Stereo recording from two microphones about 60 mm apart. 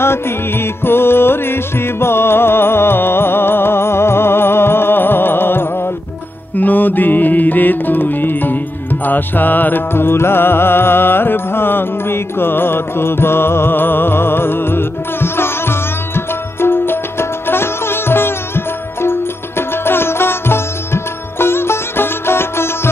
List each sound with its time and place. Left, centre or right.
0.0 s music: left